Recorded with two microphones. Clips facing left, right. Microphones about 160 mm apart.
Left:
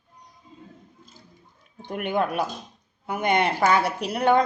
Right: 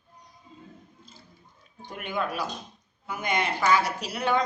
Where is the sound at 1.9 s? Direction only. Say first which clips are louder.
Left 6 dB; 55° left (ahead or behind).